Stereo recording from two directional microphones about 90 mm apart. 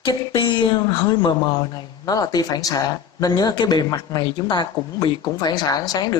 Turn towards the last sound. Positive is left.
turn(degrees=45)  # may be behind; listen again after turning